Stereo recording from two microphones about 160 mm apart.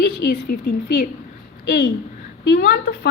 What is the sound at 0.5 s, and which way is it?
Speech, 65° left (ahead or behind).